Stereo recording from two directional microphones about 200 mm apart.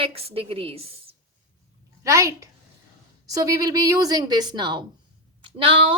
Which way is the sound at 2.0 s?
15° right (ahead or behind).